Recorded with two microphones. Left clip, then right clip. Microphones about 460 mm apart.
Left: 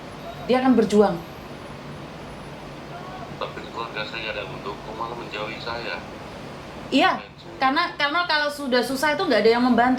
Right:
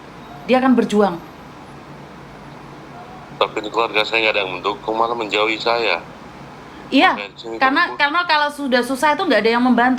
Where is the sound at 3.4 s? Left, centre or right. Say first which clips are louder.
Right 14 dB; right.